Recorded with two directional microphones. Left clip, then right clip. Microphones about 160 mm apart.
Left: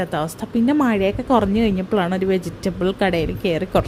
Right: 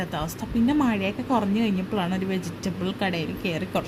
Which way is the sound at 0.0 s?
35° left (ahead or behind).